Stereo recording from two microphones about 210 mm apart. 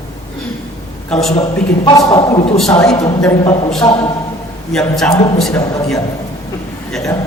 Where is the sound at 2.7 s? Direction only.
5° left (ahead or behind).